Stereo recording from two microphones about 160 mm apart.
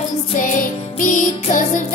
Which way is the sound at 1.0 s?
55° left (ahead or behind).